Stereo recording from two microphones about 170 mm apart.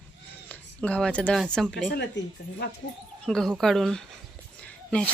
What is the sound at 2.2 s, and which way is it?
Speech, 90° left.